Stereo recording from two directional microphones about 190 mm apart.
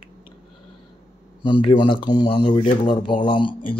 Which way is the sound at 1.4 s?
25° left (ahead or behind).